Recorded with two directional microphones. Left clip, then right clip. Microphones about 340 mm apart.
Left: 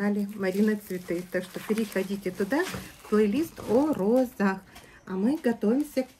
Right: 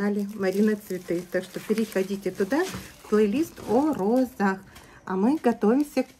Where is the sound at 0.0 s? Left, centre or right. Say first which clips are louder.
Right 2 dB; centre.